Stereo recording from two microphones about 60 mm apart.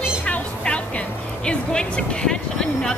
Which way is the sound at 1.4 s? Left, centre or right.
Centre.